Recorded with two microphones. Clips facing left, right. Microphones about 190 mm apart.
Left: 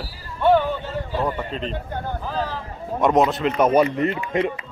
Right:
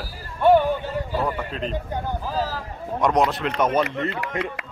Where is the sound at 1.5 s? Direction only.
5° right (ahead or behind).